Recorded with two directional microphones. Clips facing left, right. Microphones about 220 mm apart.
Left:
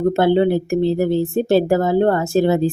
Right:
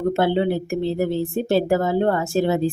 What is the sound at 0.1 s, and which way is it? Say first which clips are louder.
Speech: left 4 dB; 45° left (ahead or behind).